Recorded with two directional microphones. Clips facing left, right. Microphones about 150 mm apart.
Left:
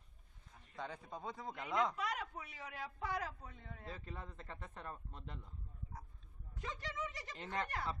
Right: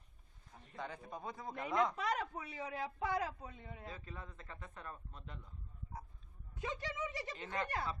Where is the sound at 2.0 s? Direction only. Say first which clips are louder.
Right 4 dB; 35° right (ahead or behind); by 3.8 s 15° right (ahead or behind).